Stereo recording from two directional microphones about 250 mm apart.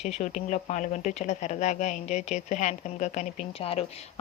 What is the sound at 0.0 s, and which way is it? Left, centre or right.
Speech, left.